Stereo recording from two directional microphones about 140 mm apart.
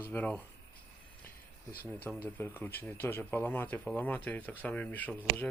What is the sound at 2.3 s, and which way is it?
Speech, 15° left (ahead or behind).